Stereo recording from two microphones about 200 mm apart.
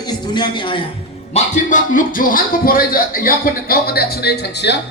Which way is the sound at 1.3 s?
40° left (ahead or behind).